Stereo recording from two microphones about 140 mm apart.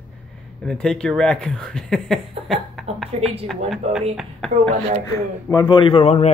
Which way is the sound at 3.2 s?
45° right (ahead or behind).